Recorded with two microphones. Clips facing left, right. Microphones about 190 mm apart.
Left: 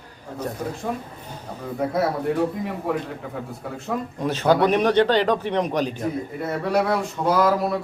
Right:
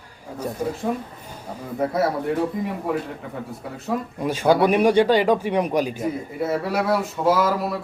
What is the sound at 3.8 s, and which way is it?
Speech, 10° right (ahead or behind).